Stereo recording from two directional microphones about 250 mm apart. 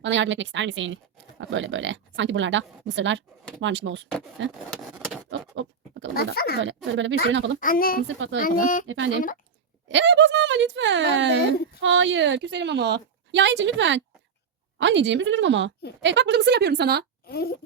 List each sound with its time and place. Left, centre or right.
0.0 s a woman's voice: right
4.9 s a sound: centre
5.3 s pig: right
6.1 s speech: left
6.9 s a woman's voice: right
7.6 s speech: left
8.0 s a woman's voice: right
8.4 s speech: left
9.9 s a woman's voice: right
17.2 s speech: left